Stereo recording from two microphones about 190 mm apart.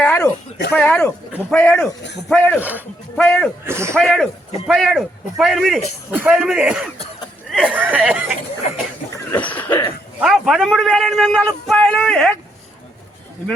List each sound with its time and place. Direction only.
0.0 s a sound: 10° left (ahead or behind)
0.7 s speech: 10° left (ahead or behind)
3.7 s speech: 15° right (ahead or behind)
3.9 s a man's voice: centre (ahead or behind)
9.1 s a sound: 10° left (ahead or behind)
10.2 s a man's voice: 5° right (ahead or behind)